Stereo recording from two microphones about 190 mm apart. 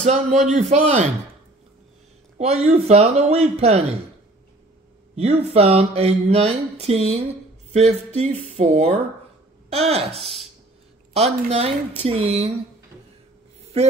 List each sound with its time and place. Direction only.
0.0 s speech: 35° right (ahead or behind)
2.3 s speech: 35° right (ahead or behind)
5.1 s speech: 35° right (ahead or behind)
10.1 s speech: centre (ahead or behind)
11.1 s speech: 35° right (ahead or behind)